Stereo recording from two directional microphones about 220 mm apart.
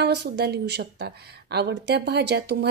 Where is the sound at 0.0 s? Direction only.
50° right (ahead or behind).